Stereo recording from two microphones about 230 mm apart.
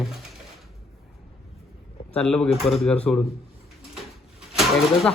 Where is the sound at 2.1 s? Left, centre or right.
Centre.